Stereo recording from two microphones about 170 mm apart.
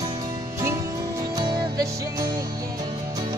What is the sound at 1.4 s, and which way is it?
Music, 25° right (ahead or behind).